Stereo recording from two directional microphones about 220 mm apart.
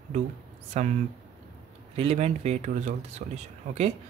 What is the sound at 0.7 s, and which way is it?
Speech, 30° right (ahead or behind).